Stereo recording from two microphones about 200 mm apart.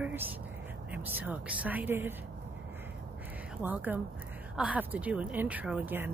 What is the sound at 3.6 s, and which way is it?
Speech, 10° right (ahead or behind).